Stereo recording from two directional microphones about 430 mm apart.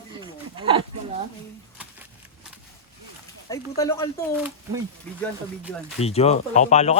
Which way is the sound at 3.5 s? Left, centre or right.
Centre.